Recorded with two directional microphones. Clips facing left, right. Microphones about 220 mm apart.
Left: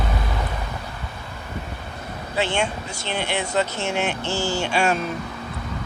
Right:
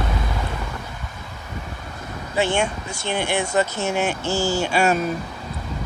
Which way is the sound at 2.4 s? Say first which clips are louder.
Right 2 dB; 50° right (ahead or behind).